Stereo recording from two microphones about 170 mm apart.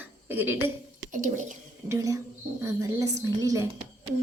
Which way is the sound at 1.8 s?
20° right (ahead or behind).